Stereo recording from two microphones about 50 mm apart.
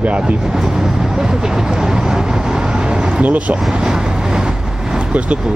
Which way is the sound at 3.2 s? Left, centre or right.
Right.